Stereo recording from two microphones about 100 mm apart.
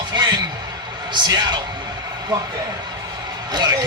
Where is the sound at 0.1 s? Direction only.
45° right (ahead or behind).